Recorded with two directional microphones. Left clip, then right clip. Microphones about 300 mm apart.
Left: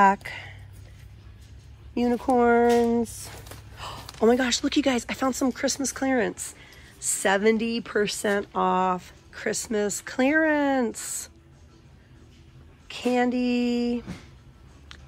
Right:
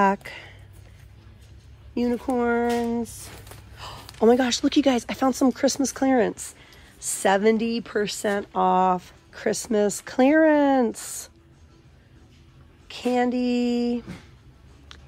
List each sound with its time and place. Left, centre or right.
0.0 s speech: centre
2.0 s speech: centre
12.8 s speech: centre